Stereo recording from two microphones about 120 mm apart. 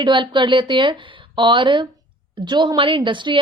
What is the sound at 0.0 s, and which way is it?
Speech, 40° right (ahead or behind).